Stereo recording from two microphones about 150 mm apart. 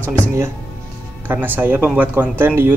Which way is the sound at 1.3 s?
15° right (ahead or behind).